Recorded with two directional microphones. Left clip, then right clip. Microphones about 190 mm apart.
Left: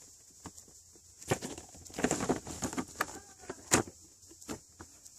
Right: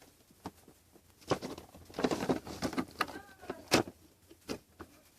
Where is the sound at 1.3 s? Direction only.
45° left (ahead or behind).